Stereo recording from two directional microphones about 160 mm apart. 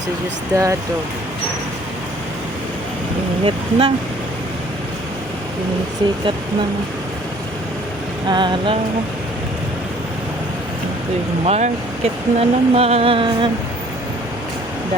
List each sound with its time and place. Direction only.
0.5 s vehicle: 20° right (ahead or behind)
3.4 s speech: 35° right (ahead or behind)
8.3 s vehicle: 30° right (ahead or behind)
11.4 s speech: 40° right (ahead or behind)